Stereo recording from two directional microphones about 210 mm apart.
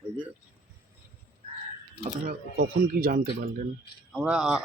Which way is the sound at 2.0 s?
45° right (ahead or behind).